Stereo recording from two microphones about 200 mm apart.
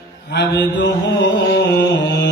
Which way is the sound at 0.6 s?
60° left (ahead or behind).